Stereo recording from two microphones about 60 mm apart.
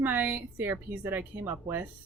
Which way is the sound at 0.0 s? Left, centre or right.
Right.